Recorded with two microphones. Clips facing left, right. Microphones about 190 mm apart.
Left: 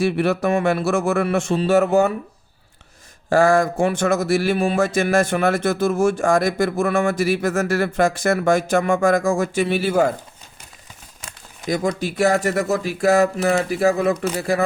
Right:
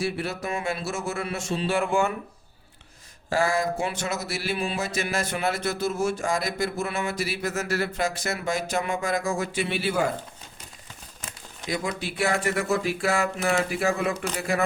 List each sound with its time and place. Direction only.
0.0 s speech: 65° left (ahead or behind); by 2.1 s 40° left (ahead or behind)
3.2 s a sound: 50° left (ahead or behind)
11.7 s speech: 45° left (ahead or behind)